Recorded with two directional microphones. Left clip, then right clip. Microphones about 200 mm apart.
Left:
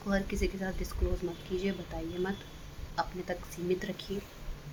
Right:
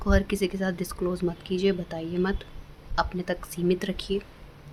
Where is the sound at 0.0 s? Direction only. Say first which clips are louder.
Right 7 dB; 50° right (ahead or behind).